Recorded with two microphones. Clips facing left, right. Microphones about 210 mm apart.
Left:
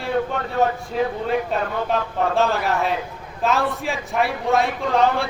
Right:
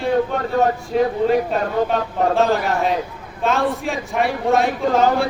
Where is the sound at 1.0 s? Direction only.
35° right (ahead or behind).